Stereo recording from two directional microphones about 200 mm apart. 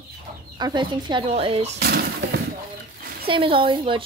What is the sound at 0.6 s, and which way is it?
Speech, 25° right (ahead or behind).